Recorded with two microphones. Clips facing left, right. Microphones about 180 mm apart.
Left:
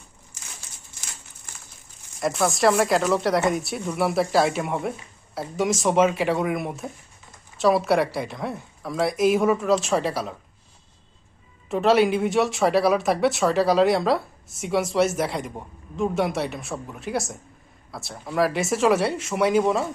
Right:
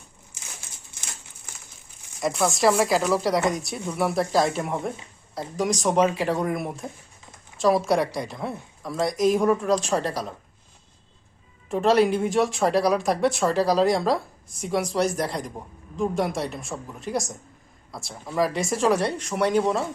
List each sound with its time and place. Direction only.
2.2 s speech: centre (ahead or behind)
11.7 s speech: centre (ahead or behind)